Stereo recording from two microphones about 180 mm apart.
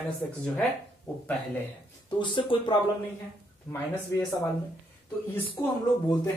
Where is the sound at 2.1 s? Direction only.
25° left (ahead or behind).